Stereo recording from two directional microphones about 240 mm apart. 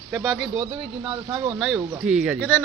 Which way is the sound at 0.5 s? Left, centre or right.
Right.